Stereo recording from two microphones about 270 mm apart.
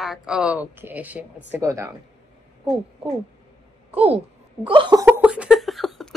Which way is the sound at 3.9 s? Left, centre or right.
Right.